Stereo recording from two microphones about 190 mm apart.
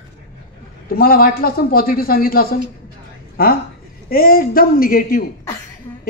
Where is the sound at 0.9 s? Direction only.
50° left (ahead or behind).